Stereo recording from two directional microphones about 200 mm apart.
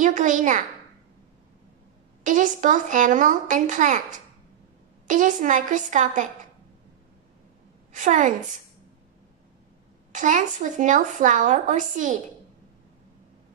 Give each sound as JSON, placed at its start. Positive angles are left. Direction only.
{"t": 0.0, "sound": "a woman's voice", "side_deg": -40}
{"t": 2.2, "sound": "a woman's voice", "side_deg": -40}
{"t": 5.0, "sound": "a woman's voice", "side_deg": -40}
{"t": 7.9, "sound": "a woman's voice", "side_deg": -40}
{"t": 10.1, "sound": "a woman's voice", "side_deg": -40}